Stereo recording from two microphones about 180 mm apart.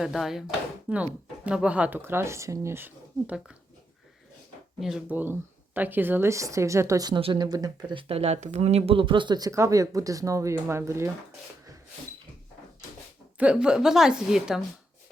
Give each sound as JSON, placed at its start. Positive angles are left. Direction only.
{"t": 0.0, "sound": "a woman's voice", "side_deg": 0}
{"t": 4.8, "sound": "speech", "side_deg": -5}
{"t": 13.4, "sound": "a woman's voice", "side_deg": -5}